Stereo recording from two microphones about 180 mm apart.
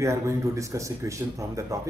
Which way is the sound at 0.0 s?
15° right (ahead or behind).